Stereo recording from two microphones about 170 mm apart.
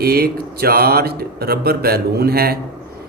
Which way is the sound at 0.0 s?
65° right (ahead or behind).